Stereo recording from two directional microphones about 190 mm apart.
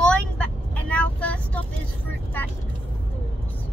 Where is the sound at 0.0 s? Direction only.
5° left (ahead or behind).